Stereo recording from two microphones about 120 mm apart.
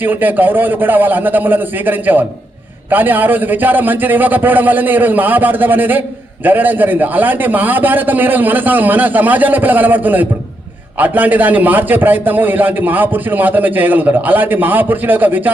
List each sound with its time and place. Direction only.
0.0 s a man's voice: 15° right (ahead or behind)